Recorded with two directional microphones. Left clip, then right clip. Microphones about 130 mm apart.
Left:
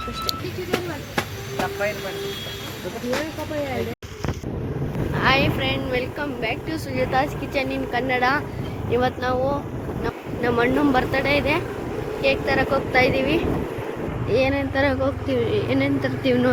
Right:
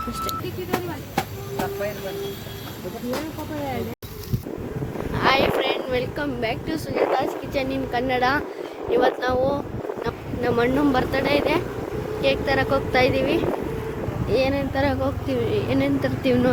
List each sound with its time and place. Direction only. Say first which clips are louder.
5.1 s vehicle: right 1 dB; 25° right (ahead or behind); by 6.7 s 45° right (ahead or behind)
7.5 s speech: left 1 dB; 25° right (ahead or behind)
9.0 s speech: right 2 dB; 40° right (ahead or behind)
10.4 s speech: left 1 dB; 15° right (ahead or behind)
12.2 s speech: left 1 dB; 30° right (ahead or behind)
16.0 s speech: even; 30° right (ahead or behind)